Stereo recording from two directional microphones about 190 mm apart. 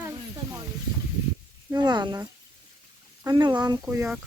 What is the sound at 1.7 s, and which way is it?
Speech, 20° right (ahead or behind).